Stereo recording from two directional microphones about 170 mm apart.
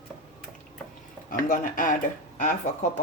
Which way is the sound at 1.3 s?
55° left (ahead or behind).